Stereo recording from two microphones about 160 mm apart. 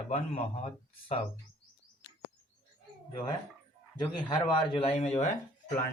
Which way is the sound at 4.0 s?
30° left (ahead or behind).